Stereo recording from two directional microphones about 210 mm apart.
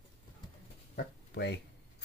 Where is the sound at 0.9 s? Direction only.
50° left (ahead or behind).